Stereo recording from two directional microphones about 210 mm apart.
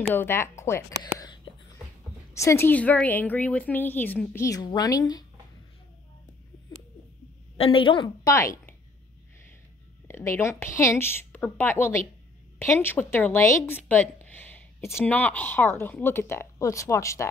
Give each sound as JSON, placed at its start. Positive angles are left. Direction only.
{"t": 0.0, "sound": "speech", "side_deg": 10}
{"t": 1.2, "sound": "whispering", "side_deg": 20}
{"t": 2.3, "sound": "speech", "side_deg": 15}
{"t": 7.5, "sound": "a woman's voice", "side_deg": 25}
{"t": 10.0, "sound": "speech", "side_deg": 10}